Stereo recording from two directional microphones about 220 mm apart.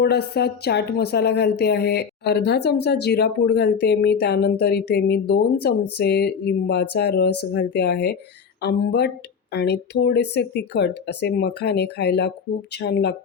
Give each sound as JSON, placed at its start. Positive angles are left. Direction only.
{"t": 0.0, "sound": "speech", "side_deg": 45}